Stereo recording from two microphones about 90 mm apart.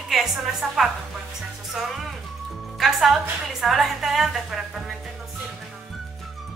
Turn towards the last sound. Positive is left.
turn(degrees=-5)  # may be behind; listen again after turning